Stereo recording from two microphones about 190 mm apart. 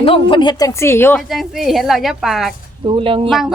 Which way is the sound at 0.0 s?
25° left (ahead or behind).